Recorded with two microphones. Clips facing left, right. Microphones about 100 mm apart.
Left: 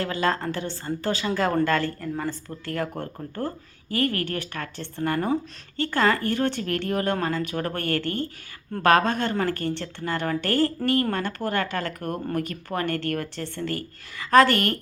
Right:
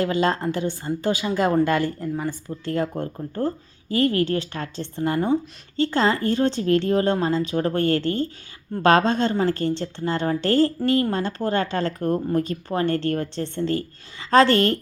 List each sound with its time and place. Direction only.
0.0 s a woman's voice: 20° right (ahead or behind)